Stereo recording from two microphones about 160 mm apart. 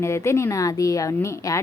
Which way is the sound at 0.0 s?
15° left (ahead or behind).